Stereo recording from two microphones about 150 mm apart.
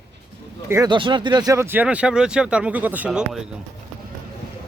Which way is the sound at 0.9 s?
30° right (ahead or behind).